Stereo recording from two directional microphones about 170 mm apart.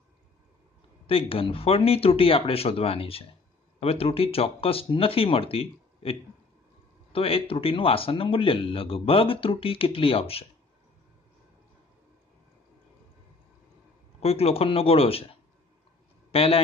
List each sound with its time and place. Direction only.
1.0 s speech: 30° left (ahead or behind)
14.2 s speech: 35° left (ahead or behind)
16.3 s a man's voice: 35° left (ahead or behind)